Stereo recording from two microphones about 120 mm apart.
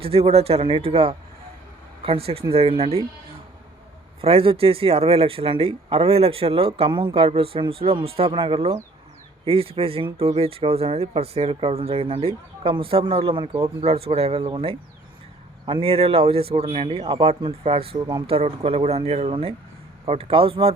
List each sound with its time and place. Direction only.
0.0 s speech: 55° right (ahead or behind)
4.2 s speech: 55° right (ahead or behind)